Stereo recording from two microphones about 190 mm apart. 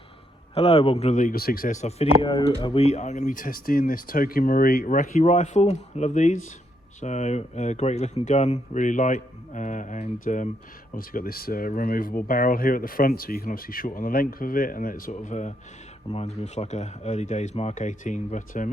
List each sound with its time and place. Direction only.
0.5 s speech: 35° left (ahead or behind)
2.2 s speech: 20° left (ahead or behind); by 18.7 s 40° left (ahead or behind)